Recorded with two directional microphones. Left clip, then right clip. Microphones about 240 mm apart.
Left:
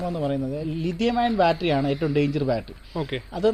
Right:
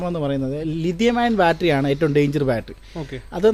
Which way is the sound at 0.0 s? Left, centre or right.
Right.